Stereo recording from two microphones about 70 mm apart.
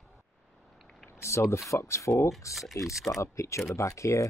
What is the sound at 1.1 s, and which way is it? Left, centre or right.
Speech, left.